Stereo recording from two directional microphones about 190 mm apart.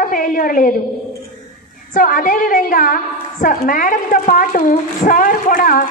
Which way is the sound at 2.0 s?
45° left (ahead or behind).